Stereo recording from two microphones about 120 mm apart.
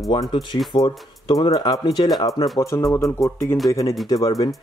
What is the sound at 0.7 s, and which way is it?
Speech, 35° left (ahead or behind).